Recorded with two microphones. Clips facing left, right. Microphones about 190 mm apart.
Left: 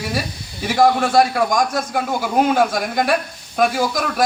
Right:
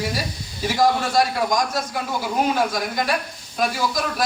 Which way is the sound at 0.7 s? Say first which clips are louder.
Left 5 dB; 55° left (ahead or behind).